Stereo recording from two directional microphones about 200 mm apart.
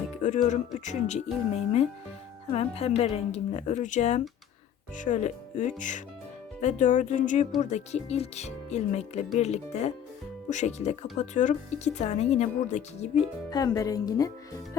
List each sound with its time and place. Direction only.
0.2 s speech: 35° left (ahead or behind)
13.5 s speech: 20° left (ahead or behind)